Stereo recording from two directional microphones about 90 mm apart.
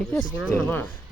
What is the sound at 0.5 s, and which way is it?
Speech, 25° left (ahead or behind).